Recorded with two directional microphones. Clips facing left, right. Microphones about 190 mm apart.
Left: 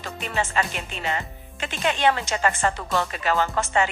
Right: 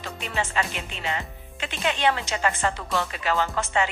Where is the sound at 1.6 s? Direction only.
45° left (ahead or behind).